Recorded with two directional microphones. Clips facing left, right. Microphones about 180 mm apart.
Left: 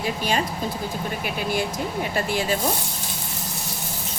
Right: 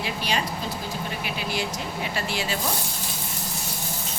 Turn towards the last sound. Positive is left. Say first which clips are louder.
# left 5 dB
turn(degrees=45)  # may be behind; listen again after turning